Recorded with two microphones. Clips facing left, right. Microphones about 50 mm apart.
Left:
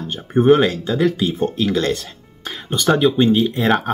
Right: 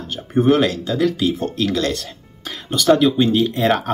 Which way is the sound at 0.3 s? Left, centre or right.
Centre.